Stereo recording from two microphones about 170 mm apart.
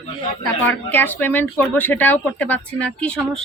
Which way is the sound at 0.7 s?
10° left (ahead or behind).